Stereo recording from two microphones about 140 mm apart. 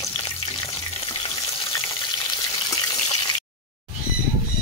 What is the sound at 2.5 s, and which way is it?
Water, 25° left (ahead or behind).